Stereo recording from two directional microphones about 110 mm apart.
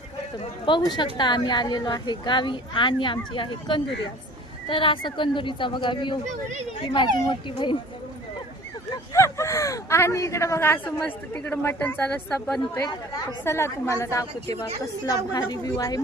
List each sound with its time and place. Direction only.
0.6 s a woman's voice: 45° left (ahead or behind)
9.1 s a woman's voice: 25° left (ahead or behind)
13.4 s a woman's voice: 25° left (ahead or behind)